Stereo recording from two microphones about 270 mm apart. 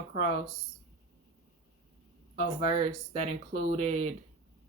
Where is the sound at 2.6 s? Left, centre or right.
Centre.